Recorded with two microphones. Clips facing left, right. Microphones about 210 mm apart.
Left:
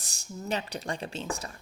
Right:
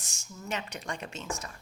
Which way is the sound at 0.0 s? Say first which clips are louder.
Left 5 dB; 35° left (ahead or behind).